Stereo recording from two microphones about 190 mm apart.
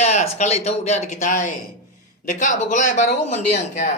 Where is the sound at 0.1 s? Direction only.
35° left (ahead or behind).